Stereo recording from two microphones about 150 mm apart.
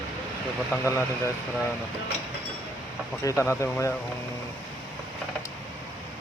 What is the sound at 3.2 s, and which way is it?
Speech, 15° left (ahead or behind).